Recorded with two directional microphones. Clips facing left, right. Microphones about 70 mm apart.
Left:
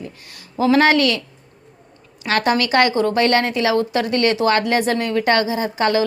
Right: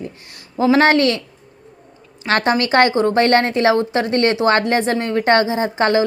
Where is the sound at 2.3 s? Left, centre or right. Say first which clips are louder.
Right 1 dB; right.